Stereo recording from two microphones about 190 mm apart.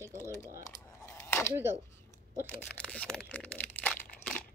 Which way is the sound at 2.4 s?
10° left (ahead or behind).